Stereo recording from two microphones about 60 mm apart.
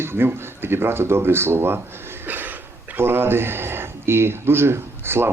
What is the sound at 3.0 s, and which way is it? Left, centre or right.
A man's voice, right.